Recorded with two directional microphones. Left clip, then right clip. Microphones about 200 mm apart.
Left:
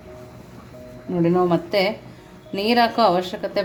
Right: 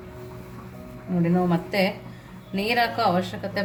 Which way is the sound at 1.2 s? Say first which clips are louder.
Left 6 dB; 35° left (ahead or behind).